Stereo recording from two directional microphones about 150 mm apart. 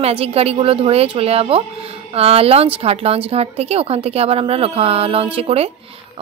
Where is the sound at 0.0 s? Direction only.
40° right (ahead or behind).